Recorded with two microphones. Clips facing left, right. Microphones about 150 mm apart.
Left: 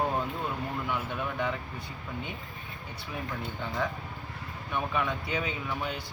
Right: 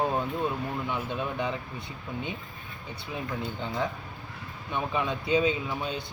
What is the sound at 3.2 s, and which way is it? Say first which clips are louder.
Speech: right 3 dB; 20° right (ahead or behind).